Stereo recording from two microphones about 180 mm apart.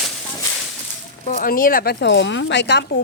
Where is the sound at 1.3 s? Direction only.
50° left (ahead or behind); by 3.0 s 70° left (ahead or behind).